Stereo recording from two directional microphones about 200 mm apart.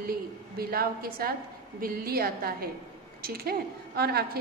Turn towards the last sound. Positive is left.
turn(degrees=-50)  # may be behind; listen again after turning